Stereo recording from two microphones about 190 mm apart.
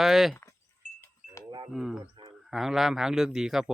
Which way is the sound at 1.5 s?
25° right (ahead or behind).